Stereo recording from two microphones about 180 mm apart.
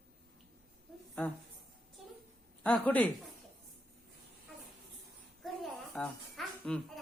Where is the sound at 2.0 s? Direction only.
5° right (ahead or behind).